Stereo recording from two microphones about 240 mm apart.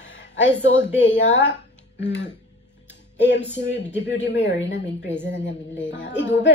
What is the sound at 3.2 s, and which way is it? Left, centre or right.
A woman's voice, left.